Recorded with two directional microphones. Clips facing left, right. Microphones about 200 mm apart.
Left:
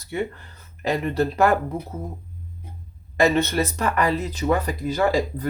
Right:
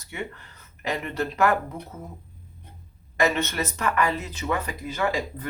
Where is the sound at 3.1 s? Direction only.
35° left (ahead or behind).